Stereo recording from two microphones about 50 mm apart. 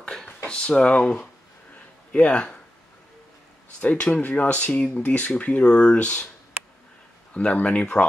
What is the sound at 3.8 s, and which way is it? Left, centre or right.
Speech, left.